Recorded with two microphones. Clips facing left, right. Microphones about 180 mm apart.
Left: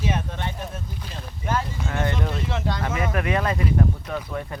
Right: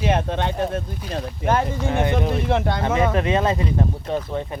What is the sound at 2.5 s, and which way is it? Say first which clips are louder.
Speech: right 6 dB; 60° right (ahead or behind).